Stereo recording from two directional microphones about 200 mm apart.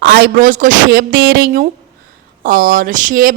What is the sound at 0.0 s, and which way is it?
A woman's voice, 50° right (ahead or behind).